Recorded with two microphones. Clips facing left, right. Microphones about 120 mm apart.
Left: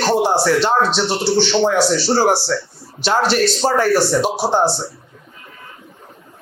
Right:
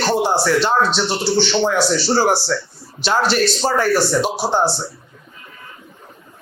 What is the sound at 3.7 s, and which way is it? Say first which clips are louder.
Speech: left 1 dB; 40° left (ahead or behind).